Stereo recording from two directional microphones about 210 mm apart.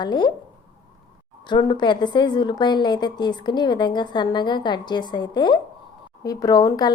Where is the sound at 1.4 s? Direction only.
20° left (ahead or behind).